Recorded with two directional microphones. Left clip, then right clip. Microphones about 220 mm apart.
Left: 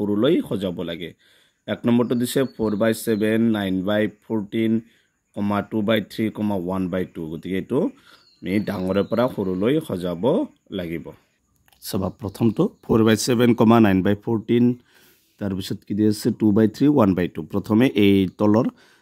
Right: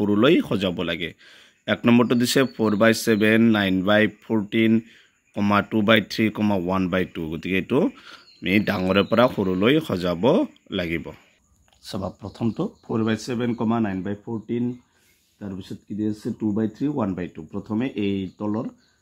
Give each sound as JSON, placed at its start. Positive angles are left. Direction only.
{"t": 0.0, "sound": "speech", "side_deg": 0}
{"t": 11.8, "sound": "speech", "side_deg": 30}